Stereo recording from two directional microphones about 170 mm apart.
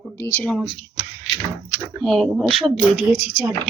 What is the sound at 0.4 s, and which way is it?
Speech, 5° left (ahead or behind).